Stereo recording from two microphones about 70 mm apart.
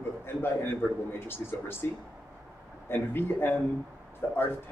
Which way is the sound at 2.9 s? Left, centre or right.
Left.